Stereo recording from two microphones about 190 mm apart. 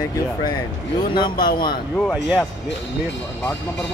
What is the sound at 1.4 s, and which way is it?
Speech, 50° left (ahead or behind).